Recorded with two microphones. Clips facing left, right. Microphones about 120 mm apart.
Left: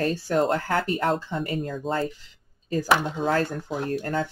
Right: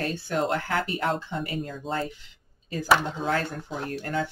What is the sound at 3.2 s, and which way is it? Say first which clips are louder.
Speech: left 4 dB; 40° left (ahead or behind).